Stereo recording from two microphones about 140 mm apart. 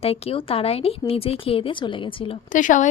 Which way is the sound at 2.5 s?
65° left (ahead or behind).